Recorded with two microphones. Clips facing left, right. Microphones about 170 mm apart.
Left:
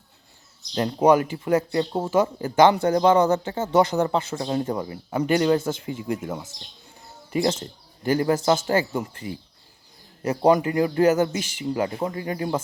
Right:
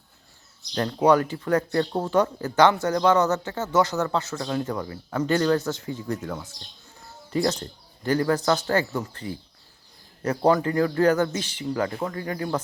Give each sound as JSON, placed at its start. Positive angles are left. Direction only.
{"t": 0.7, "sound": "speech", "side_deg": 20}
{"t": 2.8, "sound": "speech", "side_deg": 25}
{"t": 3.1, "sound": "speech", "side_deg": 10}
{"t": 7.3, "sound": "speech", "side_deg": 15}